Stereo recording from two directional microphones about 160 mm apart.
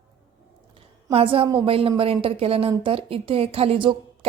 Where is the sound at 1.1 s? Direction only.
35° right (ahead or behind).